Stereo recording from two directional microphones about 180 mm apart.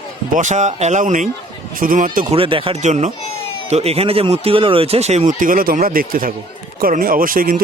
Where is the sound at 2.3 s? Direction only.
30° right (ahead or behind).